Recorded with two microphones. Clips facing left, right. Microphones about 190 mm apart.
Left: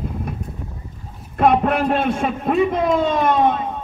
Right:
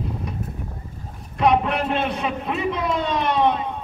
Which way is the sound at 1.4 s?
50° left (ahead or behind).